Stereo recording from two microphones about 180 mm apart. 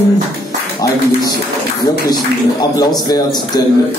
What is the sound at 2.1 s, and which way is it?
A man's voice, 20° left (ahead or behind).